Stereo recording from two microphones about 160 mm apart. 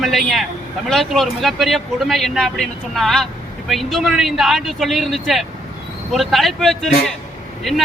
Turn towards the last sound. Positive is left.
turn(degrees=0)  # may be behind; listen again after turning